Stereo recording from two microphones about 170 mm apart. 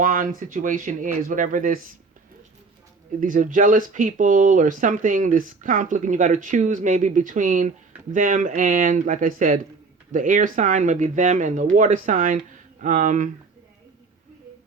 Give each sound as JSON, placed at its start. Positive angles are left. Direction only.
{"t": 0.0, "sound": "speech", "side_deg": -55}
{"t": 3.2, "sound": "speech", "side_deg": -50}